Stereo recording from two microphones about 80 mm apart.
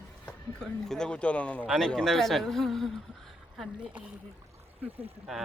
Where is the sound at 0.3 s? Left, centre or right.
Centre.